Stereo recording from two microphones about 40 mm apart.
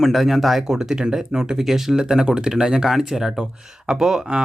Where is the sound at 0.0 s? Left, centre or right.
Centre.